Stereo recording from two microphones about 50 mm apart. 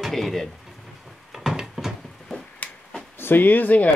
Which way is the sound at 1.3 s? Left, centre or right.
Centre.